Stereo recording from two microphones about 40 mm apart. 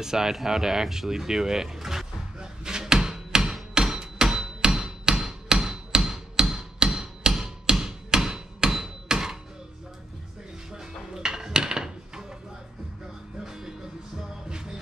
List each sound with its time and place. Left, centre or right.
0.0 s a sound: centre
3.7 s hammer: centre
10.7 s dishes: centre
13.4 s music: centre